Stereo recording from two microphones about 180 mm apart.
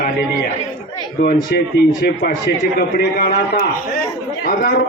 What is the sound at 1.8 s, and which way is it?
A man's voice, 65° left (ahead or behind).